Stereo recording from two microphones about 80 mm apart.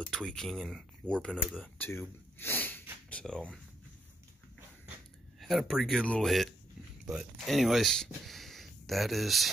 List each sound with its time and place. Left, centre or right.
0.0 s speech: centre
1.8 s a sound: left; by 3.4 s centre
5.4 s speech: centre